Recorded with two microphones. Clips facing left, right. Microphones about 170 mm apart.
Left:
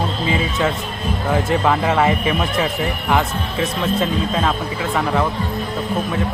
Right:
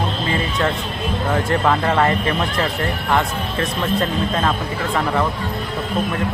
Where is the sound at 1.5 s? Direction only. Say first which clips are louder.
Even; 5° left (ahead or behind).